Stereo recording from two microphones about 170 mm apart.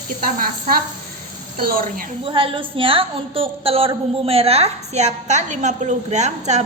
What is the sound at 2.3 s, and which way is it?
A woman's voice, 30° right (ahead or behind).